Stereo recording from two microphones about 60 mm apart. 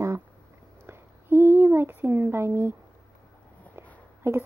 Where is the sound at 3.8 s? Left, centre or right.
Right.